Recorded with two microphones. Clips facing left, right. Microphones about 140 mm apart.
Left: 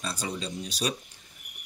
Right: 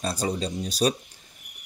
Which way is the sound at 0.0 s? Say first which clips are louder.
Right 6 dB; 40° right (ahead or behind).